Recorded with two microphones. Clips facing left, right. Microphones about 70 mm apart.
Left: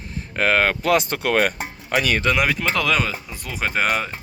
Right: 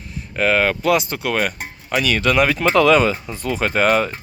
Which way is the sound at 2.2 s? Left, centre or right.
Centre.